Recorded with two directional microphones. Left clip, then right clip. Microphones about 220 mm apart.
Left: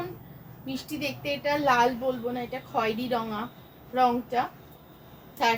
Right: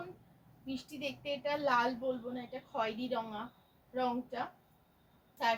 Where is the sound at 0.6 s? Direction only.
10° left (ahead or behind).